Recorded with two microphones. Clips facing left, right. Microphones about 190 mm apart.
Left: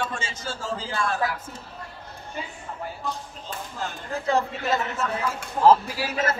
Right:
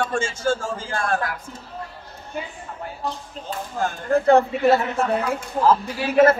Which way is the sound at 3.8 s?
55° right (ahead or behind).